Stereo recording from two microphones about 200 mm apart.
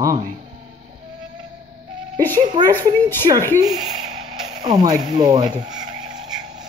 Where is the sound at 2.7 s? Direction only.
10° left (ahead or behind).